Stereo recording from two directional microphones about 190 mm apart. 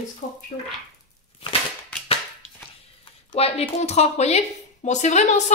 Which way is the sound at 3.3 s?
30° left (ahead or behind).